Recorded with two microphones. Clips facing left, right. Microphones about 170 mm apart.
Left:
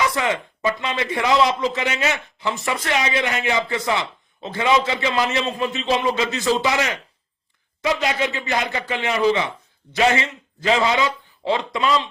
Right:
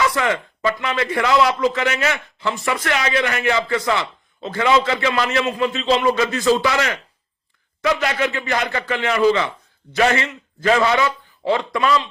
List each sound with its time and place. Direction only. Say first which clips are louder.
0.0 s a man's voice: right 2 dB; 20° left (ahead or behind)
8.2 s a man's voice: right 2 dB; 20° left (ahead or behind)